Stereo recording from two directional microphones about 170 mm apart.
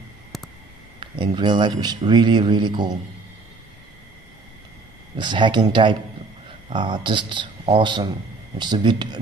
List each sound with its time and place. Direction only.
0.3 s a sound: centre (ahead or behind)
0.9 s speech: 30° right (ahead or behind)
5.1 s speech: 25° right (ahead or behind)